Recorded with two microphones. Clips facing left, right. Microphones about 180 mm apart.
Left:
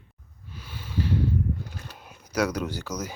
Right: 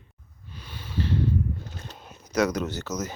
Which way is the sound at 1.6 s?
10° left (ahead or behind).